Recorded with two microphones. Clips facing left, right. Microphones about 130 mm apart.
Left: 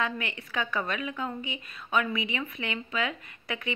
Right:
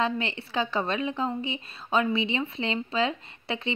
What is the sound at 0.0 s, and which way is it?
A woman's voice, 30° right (ahead or behind).